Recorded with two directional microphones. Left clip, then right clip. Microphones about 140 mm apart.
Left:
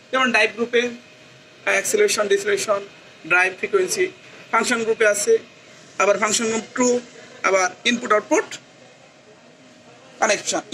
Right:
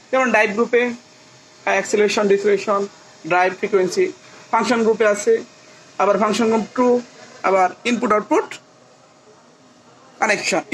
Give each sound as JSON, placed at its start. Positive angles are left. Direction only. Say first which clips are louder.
{"t": 0.1, "sound": "speech", "louder": "right 2 dB", "side_deg": -55}
{"t": 8.3, "sound": "speech", "louder": "right 2 dB", "side_deg": -60}
{"t": 10.1, "sound": "a man's voice", "louder": "right 1 dB", "side_deg": -35}